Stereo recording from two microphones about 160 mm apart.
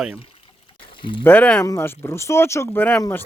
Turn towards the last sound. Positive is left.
turn(degrees=10)  # may be behind; listen again after turning